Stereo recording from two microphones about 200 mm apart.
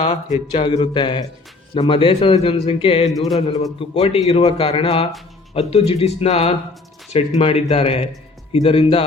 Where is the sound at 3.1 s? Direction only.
Centre (ahead or behind).